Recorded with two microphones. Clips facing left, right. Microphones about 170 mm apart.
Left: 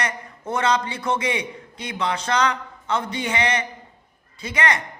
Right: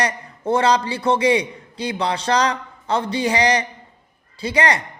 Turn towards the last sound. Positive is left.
turn(degrees=-35)  # may be behind; listen again after turning